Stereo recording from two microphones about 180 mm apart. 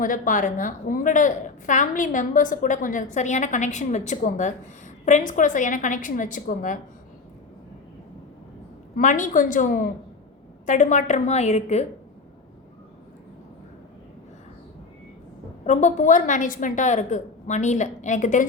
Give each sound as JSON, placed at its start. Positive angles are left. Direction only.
{"t": 0.0, "sound": "a woman's voice", "side_deg": 50}
{"t": 9.0, "sound": "a woman's voice", "side_deg": 45}
{"t": 15.6, "sound": "a woman's voice", "side_deg": 40}